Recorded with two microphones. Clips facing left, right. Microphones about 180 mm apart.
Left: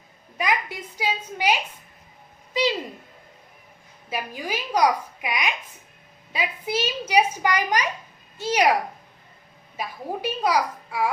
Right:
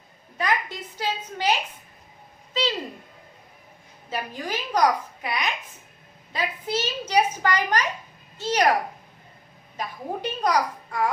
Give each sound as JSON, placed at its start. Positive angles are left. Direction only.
{"t": 0.3, "sound": "a child's voice", "side_deg": 10}
{"t": 4.1, "sound": "a child's voice", "side_deg": 10}
{"t": 9.7, "sound": "a child's voice", "side_deg": 10}